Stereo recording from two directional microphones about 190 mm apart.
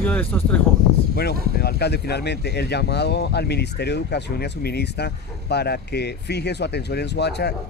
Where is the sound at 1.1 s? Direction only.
55° left (ahead or behind).